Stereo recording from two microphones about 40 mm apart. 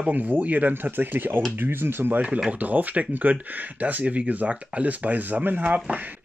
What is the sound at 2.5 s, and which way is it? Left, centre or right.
Speech, right.